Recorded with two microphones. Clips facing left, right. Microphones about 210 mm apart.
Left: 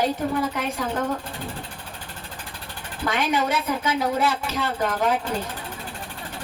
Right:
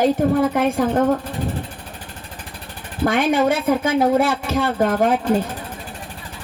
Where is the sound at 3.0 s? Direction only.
50° right (ahead or behind).